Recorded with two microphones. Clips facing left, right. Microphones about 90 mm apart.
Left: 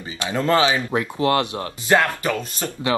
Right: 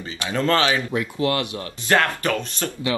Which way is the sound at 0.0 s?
20° left (ahead or behind).